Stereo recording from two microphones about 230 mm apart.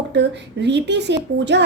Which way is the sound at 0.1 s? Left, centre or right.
Right.